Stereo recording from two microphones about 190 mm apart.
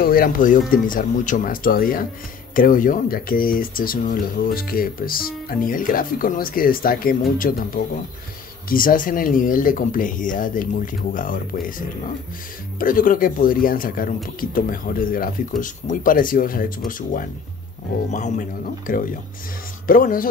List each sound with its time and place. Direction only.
0.0 s speech: 50° left (ahead or behind)
12.7 s speech: 45° left (ahead or behind)